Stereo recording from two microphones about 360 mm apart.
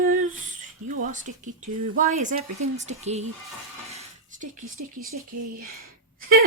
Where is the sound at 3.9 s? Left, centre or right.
Centre.